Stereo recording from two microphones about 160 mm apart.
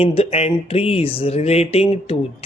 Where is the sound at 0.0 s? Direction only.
35° left (ahead or behind).